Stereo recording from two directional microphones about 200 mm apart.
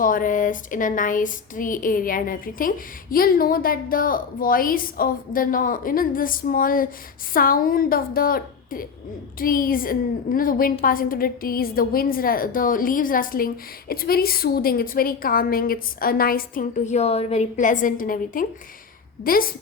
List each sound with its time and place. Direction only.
0.0 s a woman's voice: 45° left (ahead or behind)